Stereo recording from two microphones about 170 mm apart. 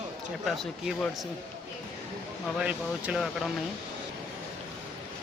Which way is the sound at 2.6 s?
5° right (ahead or behind).